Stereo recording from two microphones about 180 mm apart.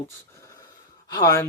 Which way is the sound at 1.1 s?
20° left (ahead or behind).